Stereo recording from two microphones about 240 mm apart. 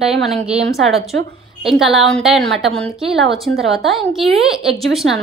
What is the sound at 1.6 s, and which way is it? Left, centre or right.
A woman's voice, centre.